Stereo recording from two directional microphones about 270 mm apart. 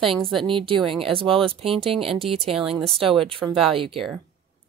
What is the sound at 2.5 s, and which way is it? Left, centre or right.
Speech, centre.